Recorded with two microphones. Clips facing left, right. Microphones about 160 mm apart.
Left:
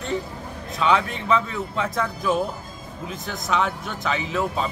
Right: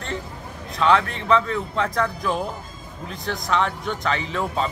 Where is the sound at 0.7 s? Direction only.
5° left (ahead or behind).